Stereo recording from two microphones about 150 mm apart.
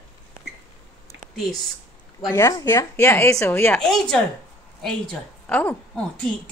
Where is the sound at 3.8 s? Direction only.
Centre (ahead or behind).